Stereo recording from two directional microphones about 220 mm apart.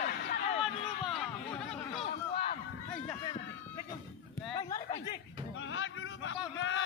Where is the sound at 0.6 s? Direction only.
Centre (ahead or behind).